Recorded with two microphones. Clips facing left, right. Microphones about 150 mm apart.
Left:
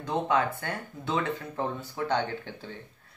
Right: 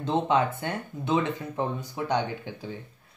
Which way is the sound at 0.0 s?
25° right (ahead or behind).